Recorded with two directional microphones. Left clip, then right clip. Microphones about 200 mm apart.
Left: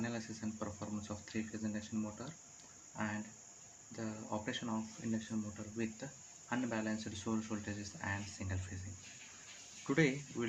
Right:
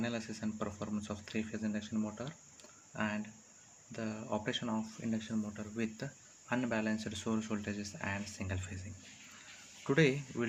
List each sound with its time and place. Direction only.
0.0 s speech: 40° right (ahead or behind)
9.8 s speech: 40° right (ahead or behind)